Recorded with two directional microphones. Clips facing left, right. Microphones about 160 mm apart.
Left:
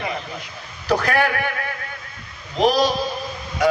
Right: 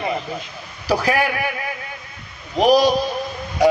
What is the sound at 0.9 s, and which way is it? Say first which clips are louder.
Speech: even; 10° right (ahead or behind).